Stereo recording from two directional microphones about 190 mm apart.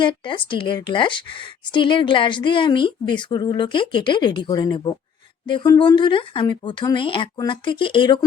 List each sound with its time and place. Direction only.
0.0 s a woman's voice: 25° left (ahead or behind)